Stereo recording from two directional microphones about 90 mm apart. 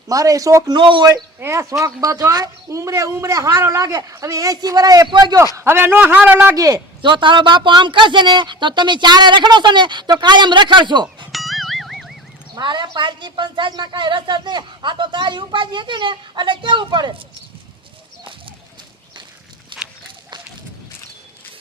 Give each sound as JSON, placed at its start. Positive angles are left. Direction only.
{"t": 0.1, "sound": "a man's voice", "side_deg": -40}
{"t": 0.8, "sound": "a man's voice", "side_deg": -65}
{"t": 1.4, "sound": "a man's voice", "side_deg": -35}
{"t": 5.5, "sound": "a man's voice", "side_deg": -25}
{"t": 6.6, "sound": "speech", "side_deg": -40}
{"t": 7.0, "sound": "a woman's voice", "side_deg": -65}
{"t": 11.3, "sound": "music", "side_deg": 0}
{"t": 12.5, "sound": "a woman's voice", "side_deg": -55}
{"t": 19.7, "sound": "walk", "side_deg": -60}